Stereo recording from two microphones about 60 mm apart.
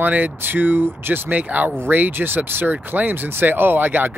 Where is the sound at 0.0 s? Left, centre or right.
Right.